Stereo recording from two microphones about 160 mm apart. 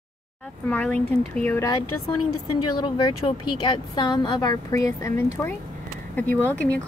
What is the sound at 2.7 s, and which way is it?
Speech, 30° left (ahead or behind).